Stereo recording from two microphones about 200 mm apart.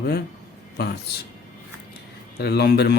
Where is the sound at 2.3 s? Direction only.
55° left (ahead or behind).